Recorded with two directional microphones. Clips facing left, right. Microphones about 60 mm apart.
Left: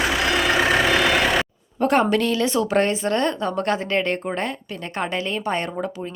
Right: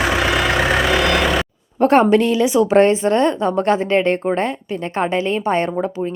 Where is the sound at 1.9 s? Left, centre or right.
Right.